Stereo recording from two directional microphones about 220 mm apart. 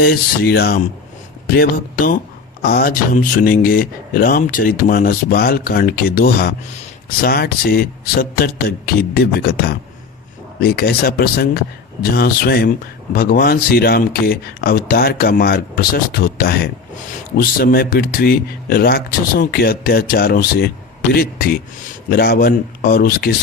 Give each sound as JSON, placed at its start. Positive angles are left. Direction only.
{"t": 0.0, "sound": "speech", "side_deg": 45}